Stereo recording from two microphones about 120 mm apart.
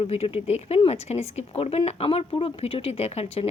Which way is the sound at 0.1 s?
55° left (ahead or behind).